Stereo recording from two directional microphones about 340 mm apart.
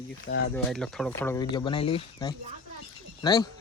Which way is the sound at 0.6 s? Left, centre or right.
Centre.